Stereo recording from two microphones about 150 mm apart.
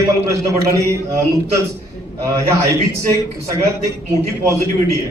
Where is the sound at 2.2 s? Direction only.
20° right (ahead or behind).